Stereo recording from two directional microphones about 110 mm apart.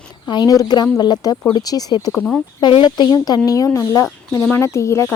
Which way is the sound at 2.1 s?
15° left (ahead or behind).